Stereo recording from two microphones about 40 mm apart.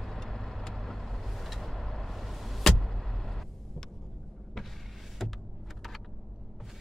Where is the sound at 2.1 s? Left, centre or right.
Centre.